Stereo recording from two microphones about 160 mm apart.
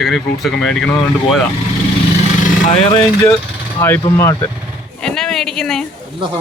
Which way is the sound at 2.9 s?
20° left (ahead or behind).